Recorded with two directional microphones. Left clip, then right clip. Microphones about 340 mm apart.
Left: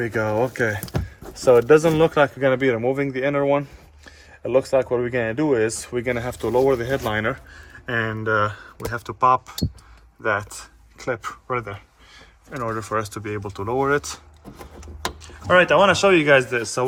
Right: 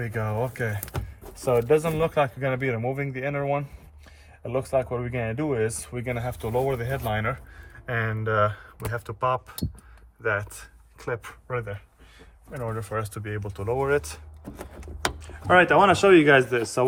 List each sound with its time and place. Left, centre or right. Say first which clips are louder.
0.0 s a man's voice: left 8 dB; left
4.0 s a sound: left 9 dB; left
5.0 s a man's voice: left 7 dB; left; by 14.2 s centre
14.8 s speech: right 1 dB; centre